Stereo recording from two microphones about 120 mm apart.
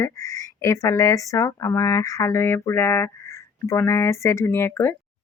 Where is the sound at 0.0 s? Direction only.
25° left (ahead or behind).